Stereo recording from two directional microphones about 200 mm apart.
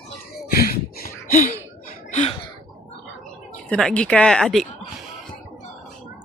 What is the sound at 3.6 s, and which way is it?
Speech, 5° left (ahead or behind).